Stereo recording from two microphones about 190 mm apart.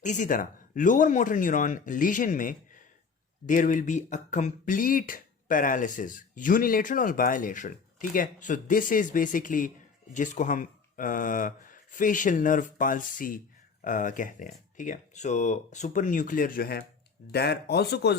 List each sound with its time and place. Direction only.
0.0 s speech: 40° left (ahead or behind); by 18.2 s 60° left (ahead or behind)